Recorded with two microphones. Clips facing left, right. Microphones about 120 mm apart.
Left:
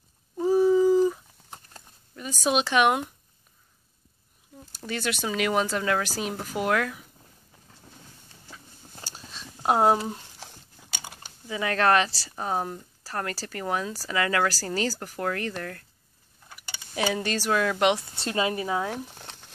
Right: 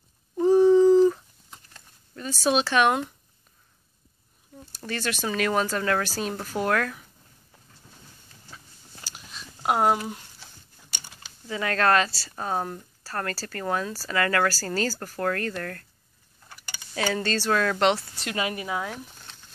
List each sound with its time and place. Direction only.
0.4 s cat: 5° left (ahead or behind)
2.1 s speech: 15° left (ahead or behind)
4.7 s speech: 15° left (ahead or behind)
9.1 s a sound: 30° left (ahead or behind)
10.4 s biting: 85° left
11.4 s speech: 15° left (ahead or behind)
16.9 s speech: 15° left (ahead or behind)
18.2 s speech: 30° left (ahead or behind)
19.1 s a sound: 70° left (ahead or behind)